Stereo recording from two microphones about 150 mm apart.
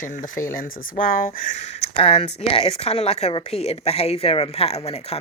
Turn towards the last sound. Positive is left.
turn(degrees=45)  # may be behind; listen again after turning